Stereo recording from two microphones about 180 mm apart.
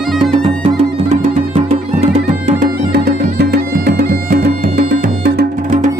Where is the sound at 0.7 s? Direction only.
35° right (ahead or behind); by 5.8 s 60° right (ahead or behind).